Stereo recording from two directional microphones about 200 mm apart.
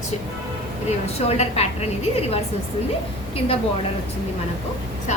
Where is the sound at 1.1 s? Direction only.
30° left (ahead or behind).